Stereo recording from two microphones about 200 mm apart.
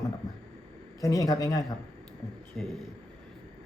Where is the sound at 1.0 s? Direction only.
15° left (ahead or behind).